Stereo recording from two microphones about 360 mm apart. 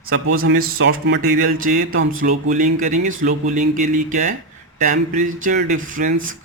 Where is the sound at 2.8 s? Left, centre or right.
Right.